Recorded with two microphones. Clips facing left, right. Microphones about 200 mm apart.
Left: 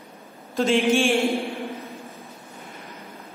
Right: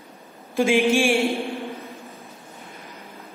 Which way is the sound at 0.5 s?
10° right (ahead or behind).